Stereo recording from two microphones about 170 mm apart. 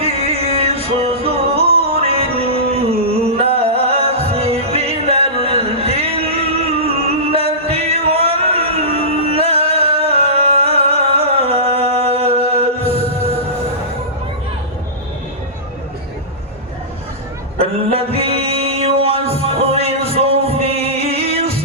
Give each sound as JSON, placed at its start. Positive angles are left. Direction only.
{"t": 0.0, "sound": "music", "side_deg": -35}
{"t": 17.9, "sound": "music", "side_deg": -35}